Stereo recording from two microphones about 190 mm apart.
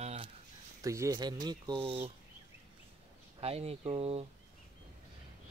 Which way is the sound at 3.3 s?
30° right (ahead or behind).